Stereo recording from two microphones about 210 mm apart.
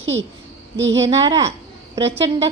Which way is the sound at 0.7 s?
60° right (ahead or behind).